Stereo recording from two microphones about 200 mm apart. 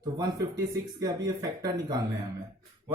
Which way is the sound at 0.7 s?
20° right (ahead or behind).